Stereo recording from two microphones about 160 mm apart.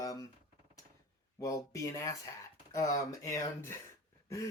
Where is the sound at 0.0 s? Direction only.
20° left (ahead or behind).